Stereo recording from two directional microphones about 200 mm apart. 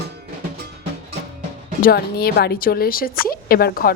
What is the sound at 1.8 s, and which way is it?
Speech, 50° left (ahead or behind).